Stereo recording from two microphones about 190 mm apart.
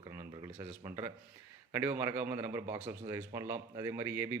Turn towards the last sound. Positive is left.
turn(degrees=-10)  # may be behind; listen again after turning